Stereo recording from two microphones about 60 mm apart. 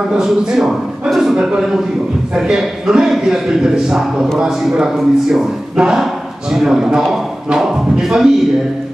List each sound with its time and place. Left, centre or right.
0.1 s a man's voice: centre